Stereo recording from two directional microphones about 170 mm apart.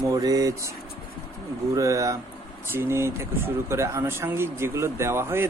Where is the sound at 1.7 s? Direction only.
20° right (ahead or behind).